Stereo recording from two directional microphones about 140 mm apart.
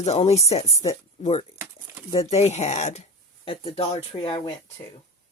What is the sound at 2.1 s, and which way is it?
Speech, 45° left (ahead or behind).